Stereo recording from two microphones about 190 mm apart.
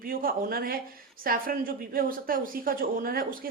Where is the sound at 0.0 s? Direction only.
50° right (ahead or behind).